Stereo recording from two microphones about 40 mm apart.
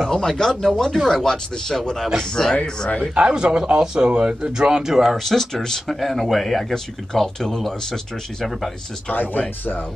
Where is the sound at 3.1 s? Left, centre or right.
Right.